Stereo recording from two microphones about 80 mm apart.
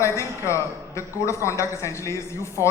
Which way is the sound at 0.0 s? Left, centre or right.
Left.